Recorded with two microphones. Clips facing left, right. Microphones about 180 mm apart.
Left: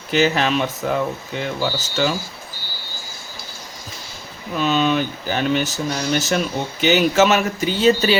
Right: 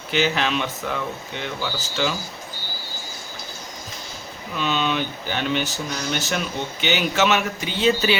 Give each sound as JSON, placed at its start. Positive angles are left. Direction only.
{"t": 0.1, "sound": "speech", "side_deg": 45}
{"t": 4.5, "sound": "speech", "side_deg": 40}